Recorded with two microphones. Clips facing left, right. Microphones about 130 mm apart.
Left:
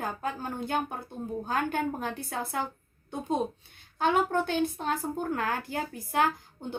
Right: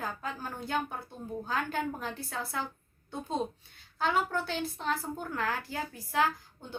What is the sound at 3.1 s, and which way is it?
A woman's voice, 20° left (ahead or behind).